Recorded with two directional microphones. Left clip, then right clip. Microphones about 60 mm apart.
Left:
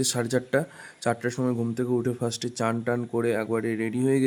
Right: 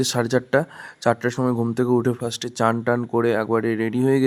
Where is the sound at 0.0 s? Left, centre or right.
Right.